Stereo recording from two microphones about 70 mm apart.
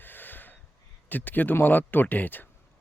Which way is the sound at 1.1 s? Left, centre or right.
Left.